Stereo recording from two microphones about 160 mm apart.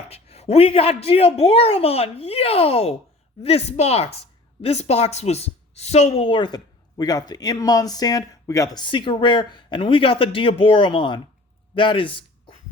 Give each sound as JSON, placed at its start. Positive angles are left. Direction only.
{"t": 0.1, "sound": "a woman's voice", "side_deg": 40}